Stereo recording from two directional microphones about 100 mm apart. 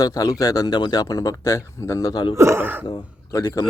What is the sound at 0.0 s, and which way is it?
Speech, 35° left (ahead or behind).